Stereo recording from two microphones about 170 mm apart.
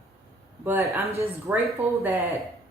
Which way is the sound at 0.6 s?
15° right (ahead or behind).